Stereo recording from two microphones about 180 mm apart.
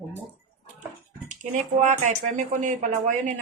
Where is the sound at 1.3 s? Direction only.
45° right (ahead or behind).